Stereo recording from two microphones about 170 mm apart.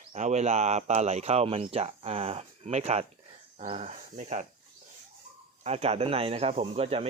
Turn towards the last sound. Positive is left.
turn(degrees=-35)  # may be behind; listen again after turning